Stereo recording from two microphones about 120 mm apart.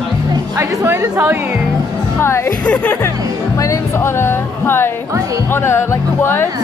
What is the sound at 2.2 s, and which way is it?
Speech, 20° left (ahead or behind).